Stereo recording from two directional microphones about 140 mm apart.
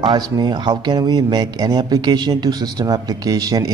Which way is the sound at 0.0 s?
35° right (ahead or behind).